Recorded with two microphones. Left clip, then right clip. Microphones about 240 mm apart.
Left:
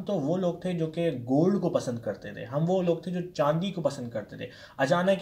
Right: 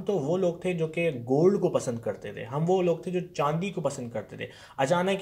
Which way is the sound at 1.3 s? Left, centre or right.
Right.